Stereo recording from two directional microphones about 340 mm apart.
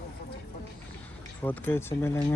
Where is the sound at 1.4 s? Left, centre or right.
Centre.